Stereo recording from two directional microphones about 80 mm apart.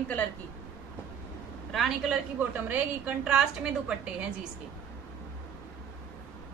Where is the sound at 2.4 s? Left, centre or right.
Centre.